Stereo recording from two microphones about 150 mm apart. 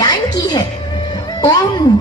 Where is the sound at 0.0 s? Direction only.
25° left (ahead or behind).